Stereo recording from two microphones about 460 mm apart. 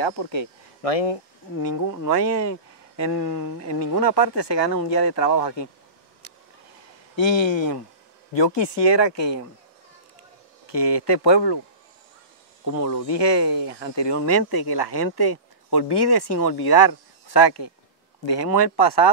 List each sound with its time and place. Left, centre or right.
0.0 s speech: left
1.6 s speech: left
7.2 s speech: left
10.7 s speech: left
12.8 s speech: left